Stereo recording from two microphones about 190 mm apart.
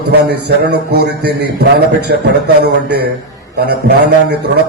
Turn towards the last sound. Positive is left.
turn(degrees=-60)  # may be behind; listen again after turning